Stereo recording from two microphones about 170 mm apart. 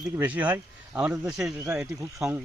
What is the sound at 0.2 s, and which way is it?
Speech, 10° right (ahead or behind).